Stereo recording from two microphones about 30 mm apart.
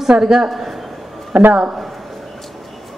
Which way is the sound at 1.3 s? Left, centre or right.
Right.